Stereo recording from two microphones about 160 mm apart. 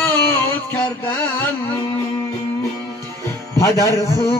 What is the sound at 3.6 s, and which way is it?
Speech, 20° left (ahead or behind).